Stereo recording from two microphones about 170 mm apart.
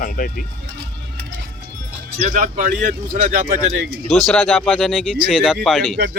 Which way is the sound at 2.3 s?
45° right (ahead or behind).